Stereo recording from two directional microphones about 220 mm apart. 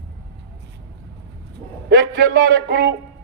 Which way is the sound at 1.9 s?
50° right (ahead or behind).